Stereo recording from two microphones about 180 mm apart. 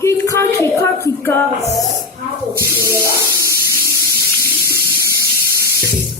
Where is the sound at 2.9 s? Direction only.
15° right (ahead or behind).